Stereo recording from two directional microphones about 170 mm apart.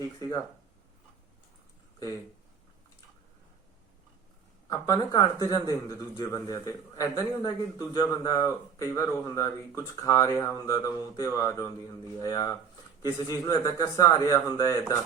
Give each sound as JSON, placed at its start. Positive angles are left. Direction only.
{"t": 0.2, "sound": "speech", "side_deg": 20}
{"t": 4.7, "sound": "speech", "side_deg": 20}